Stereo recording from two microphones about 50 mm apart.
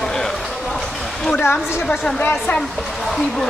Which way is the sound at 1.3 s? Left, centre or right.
Left.